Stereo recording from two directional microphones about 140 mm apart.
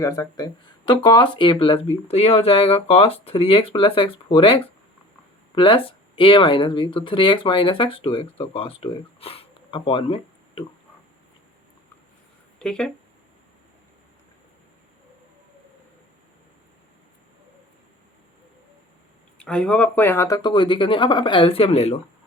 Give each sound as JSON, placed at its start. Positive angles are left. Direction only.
{"t": 0.0, "sound": "speech", "side_deg": 25}
{"t": 12.5, "sound": "speech", "side_deg": 5}
{"t": 19.4, "sound": "speech", "side_deg": 5}